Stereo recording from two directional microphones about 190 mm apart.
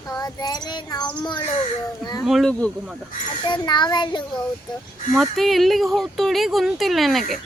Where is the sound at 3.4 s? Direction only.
25° left (ahead or behind).